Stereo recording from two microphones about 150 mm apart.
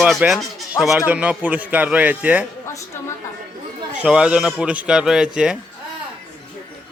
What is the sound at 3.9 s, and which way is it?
A man's voice, 5° right (ahead or behind).